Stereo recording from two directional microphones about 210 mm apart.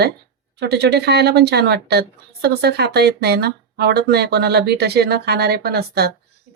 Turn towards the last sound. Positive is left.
turn(degrees=-50)  # may be behind; listen again after turning